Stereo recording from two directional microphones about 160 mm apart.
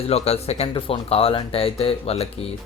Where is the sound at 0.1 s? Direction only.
40° left (ahead or behind).